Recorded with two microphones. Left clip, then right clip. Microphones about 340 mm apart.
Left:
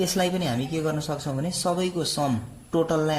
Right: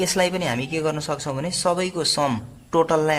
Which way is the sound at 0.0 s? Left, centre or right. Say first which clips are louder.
Right 4 dB; right.